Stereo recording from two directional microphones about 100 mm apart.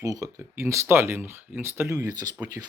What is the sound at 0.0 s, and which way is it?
Speech, 35° right (ahead or behind).